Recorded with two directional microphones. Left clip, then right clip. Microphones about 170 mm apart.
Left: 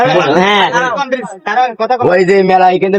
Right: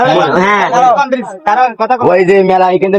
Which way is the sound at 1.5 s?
55° left (ahead or behind).